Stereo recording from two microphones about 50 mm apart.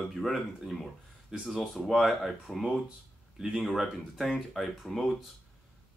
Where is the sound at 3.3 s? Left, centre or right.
Centre.